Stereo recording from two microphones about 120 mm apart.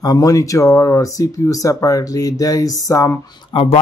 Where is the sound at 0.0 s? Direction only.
30° left (ahead or behind).